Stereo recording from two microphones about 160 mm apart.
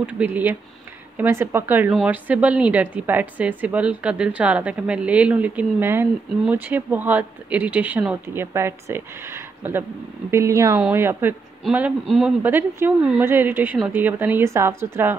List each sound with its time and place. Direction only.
0.0 s a woman's voice: 10° right (ahead or behind)
12.1 s speech: centre (ahead or behind)
12.4 s a woman's voice: 15° right (ahead or behind)